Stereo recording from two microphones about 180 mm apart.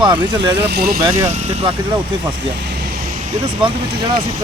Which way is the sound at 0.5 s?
65° right (ahead or behind).